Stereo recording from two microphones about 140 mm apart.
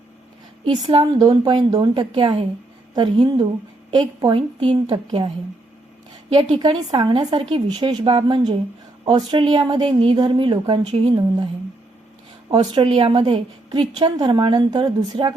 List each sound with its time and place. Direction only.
0.6 s a woman's voice: 35° right (ahead or behind)
6.3 s a woman's voice: 35° right (ahead or behind)
12.5 s a woman's voice: 30° right (ahead or behind)